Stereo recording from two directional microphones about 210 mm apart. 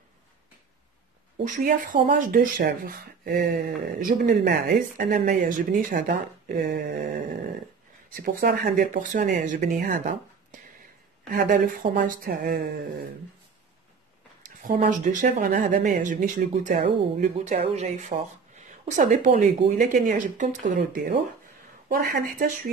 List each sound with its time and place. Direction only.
1.4 s speech: 35° right (ahead or behind)
14.4 s speech: 40° right (ahead or behind)